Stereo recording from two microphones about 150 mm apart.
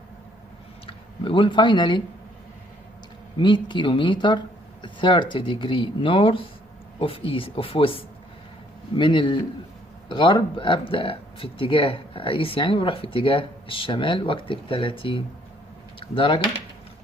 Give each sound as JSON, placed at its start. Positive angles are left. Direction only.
{"t": 0.8, "sound": "speech", "side_deg": 35}
{"t": 3.3, "sound": "speech", "side_deg": 30}